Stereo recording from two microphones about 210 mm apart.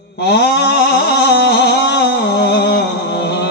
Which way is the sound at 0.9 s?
50° left (ahead or behind).